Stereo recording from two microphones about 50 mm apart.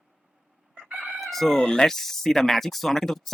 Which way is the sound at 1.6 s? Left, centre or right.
Centre.